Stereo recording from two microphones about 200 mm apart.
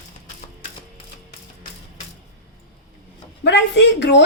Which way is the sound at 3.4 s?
60° left (ahead or behind).